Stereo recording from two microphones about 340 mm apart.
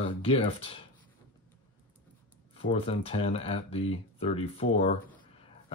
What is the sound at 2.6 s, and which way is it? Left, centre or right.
Speech, centre.